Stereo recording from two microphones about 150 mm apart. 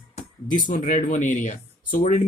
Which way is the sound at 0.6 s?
60° left (ahead or behind).